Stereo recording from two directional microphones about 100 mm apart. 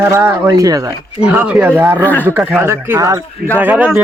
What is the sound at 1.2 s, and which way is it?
Speech, 10° right (ahead or behind).